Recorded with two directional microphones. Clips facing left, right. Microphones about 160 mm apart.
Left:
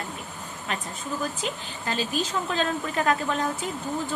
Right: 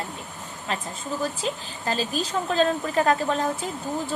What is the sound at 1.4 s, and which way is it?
Speech, 35° right (ahead or behind).